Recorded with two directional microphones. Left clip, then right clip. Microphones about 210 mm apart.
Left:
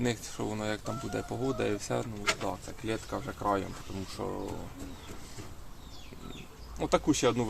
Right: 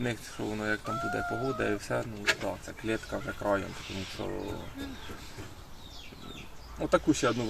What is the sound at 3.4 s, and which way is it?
Speech, 15° left (ahead or behind).